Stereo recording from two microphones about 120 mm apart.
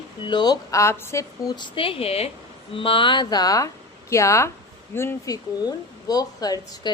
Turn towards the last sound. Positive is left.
turn(degrees=35)  # may be behind; listen again after turning